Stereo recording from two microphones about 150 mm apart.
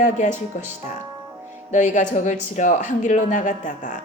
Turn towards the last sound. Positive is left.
turn(degrees=55)  # may be behind; listen again after turning